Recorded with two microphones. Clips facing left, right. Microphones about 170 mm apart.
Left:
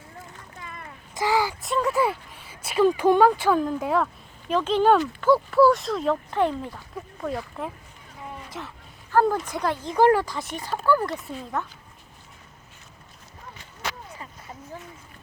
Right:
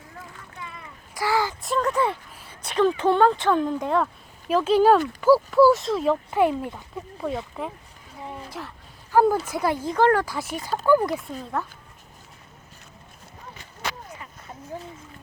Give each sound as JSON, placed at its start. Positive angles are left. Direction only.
{"t": 0.6, "sound": "a sound", "side_deg": 50}
{"t": 1.1, "sound": "a sound", "side_deg": 20}
{"t": 1.6, "sound": "speech", "side_deg": 0}
{"t": 7.2, "sound": "speech", "side_deg": 0}
{"t": 9.9, "sound": "speech", "side_deg": 10}
{"t": 10.2, "sound": "speech", "side_deg": -5}